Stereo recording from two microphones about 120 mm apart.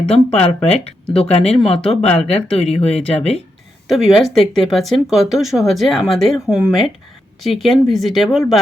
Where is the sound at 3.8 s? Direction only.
Centre (ahead or behind).